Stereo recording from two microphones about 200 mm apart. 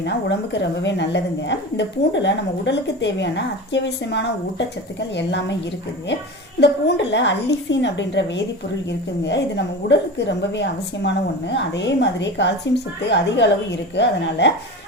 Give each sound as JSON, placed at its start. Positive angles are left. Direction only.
{"t": 0.0, "sound": "a woman's voice", "side_deg": 60}
{"t": 6.6, "sound": "a woman's voice", "side_deg": 60}